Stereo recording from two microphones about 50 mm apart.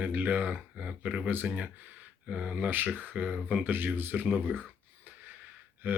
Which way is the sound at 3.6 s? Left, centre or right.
Right.